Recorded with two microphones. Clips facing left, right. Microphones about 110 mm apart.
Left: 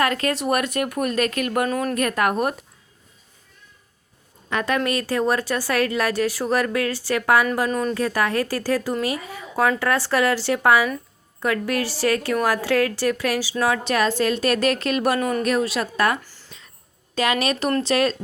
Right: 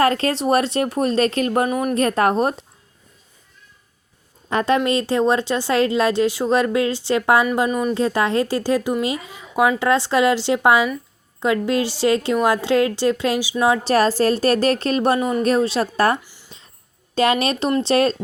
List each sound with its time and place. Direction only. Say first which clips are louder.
0.0 s a woman's voice: right 4 dB; 30° right (ahead or behind)
1.7 s speech: right 3 dB; 15° right (ahead or behind)
2.0 s a woman's voice: right 5 dB; 30° right (ahead or behind)
4.4 s a woman's voice: right 4 dB; 30° right (ahead or behind)
7.7 s speech: right 2 dB; 10° right (ahead or behind)
7.9 s a woman's voice: right 3 dB; 25° right (ahead or behind)
13.8 s a woman's voice: right 4 dB; 35° right (ahead or behind)
15.2 s a woman's voice: right 2 dB; 20° right (ahead or behind)
15.4 s a woman's voice: right 4 dB; 30° right (ahead or behind)
16.2 s a sound: even; 15° right (ahead or behind)
17.2 s a woman's voice: right 4 dB; 30° right (ahead or behind)